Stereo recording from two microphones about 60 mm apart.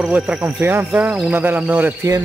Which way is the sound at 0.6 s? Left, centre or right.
Right.